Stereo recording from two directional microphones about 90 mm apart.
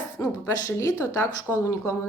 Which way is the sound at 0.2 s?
30° left (ahead or behind).